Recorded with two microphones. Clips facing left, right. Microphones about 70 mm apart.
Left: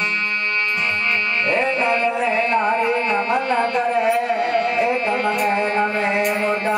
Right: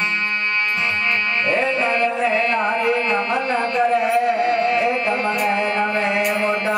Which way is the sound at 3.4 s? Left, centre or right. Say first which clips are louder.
Left 2 dB; left.